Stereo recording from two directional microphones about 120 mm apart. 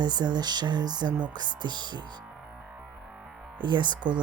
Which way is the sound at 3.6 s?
40° right (ahead or behind).